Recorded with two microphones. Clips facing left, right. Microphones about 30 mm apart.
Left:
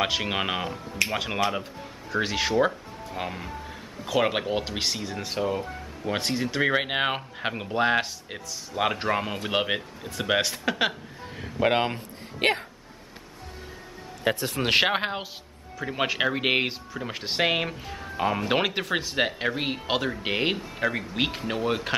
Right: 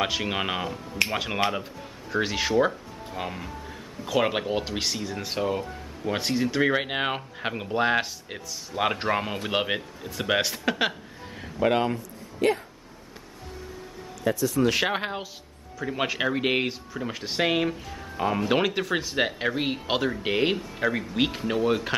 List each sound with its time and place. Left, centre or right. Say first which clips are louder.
0.0 s speech: left 1 dB; centre
5.2 s speech: even; centre
11.6 s speech: even; left
12.4 s speech: even; left
14.2 s a man's voice: right 3 dB; left
14.9 s speech: left 2 dB; left
15.8 s speech: left 1 dB; centre